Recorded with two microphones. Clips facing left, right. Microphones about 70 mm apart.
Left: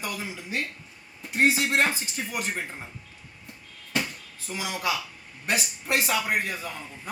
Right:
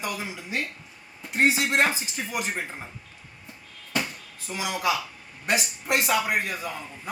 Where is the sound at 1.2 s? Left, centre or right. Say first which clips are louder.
Even; centre.